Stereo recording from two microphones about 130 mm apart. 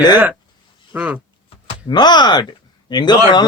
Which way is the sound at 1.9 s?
35° left (ahead or behind).